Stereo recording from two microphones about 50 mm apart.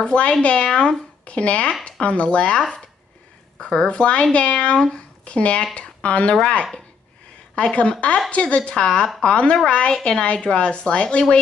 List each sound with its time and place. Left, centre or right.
0.0 s speech: left